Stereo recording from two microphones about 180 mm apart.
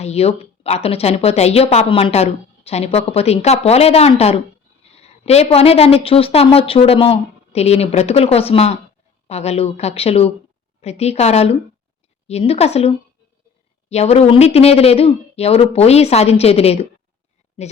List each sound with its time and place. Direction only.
0.0 s speech: 35° left (ahead or behind)
13.9 s speech: 35° left (ahead or behind)